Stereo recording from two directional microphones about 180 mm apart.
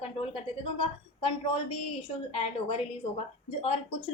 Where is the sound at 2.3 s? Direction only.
30° left (ahead or behind).